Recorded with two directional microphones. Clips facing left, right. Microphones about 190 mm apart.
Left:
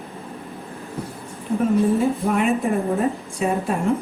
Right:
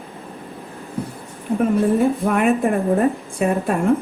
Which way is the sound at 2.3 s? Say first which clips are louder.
Right 2 dB; 55° right (ahead or behind).